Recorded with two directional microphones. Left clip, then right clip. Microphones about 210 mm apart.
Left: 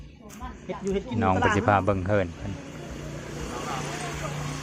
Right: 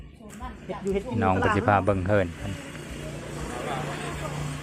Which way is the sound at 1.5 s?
Centre (ahead or behind).